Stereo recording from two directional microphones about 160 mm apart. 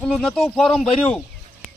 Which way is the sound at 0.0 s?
5° left (ahead or behind).